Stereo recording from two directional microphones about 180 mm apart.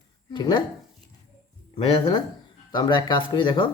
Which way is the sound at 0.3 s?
25° left (ahead or behind).